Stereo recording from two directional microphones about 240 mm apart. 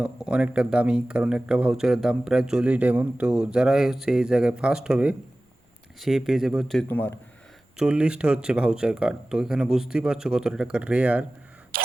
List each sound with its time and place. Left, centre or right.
0.0 s speech: centre
7.8 s speech: centre
11.7 s a sound: right